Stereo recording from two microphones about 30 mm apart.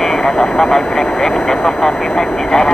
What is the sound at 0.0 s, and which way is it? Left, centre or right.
Speech, centre.